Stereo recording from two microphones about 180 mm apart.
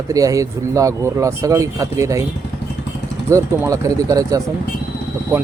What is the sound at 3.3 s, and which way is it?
Speech, 15° right (ahead or behind).